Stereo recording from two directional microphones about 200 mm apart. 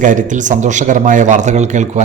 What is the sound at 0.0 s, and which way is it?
A man's voice, 40° right (ahead or behind).